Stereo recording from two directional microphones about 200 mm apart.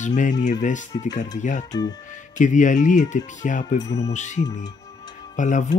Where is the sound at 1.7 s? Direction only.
20° left (ahead or behind).